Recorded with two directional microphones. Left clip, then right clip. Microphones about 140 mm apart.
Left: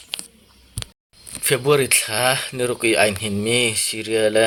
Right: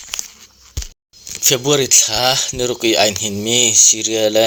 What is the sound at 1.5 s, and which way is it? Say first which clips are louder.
Speech: right 3 dB; 35° right (ahead or behind).